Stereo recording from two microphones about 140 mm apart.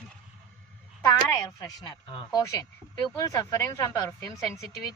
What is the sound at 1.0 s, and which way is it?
Speech, 25° left (ahead or behind).